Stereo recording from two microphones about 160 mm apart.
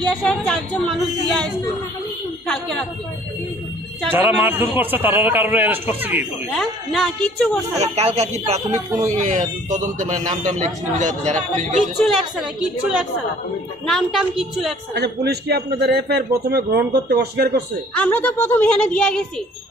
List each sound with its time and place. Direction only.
0.1 s speech: 5° left (ahead or behind)
4.1 s speech: 10° right (ahead or behind)
6.5 s speech: centre (ahead or behind)
7.7 s speech: 40° right (ahead or behind)
11.8 s speech: centre (ahead or behind)
15.0 s a man's voice: 90° right
17.9 s a woman's voice: 10° left (ahead or behind)